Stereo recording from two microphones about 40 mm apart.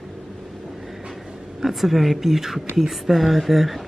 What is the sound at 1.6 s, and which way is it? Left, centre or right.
Speech, centre.